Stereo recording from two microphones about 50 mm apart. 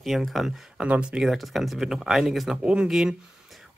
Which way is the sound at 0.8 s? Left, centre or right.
Right.